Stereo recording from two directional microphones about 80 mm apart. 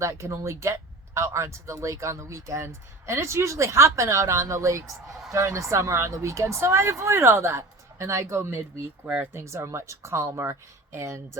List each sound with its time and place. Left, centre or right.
0.0 s speech: right
9.0 s speech: right